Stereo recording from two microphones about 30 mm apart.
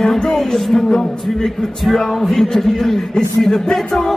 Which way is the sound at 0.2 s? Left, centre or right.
Centre.